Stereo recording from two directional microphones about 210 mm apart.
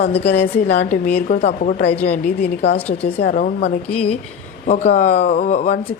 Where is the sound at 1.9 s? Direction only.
30° left (ahead or behind).